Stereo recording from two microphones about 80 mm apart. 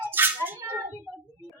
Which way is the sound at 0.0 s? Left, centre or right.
Right.